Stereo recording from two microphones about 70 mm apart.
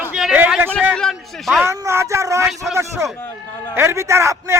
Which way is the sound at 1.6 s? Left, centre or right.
Right.